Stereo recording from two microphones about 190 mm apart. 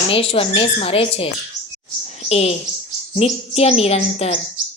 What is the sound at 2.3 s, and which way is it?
Bird, 35° left (ahead or behind).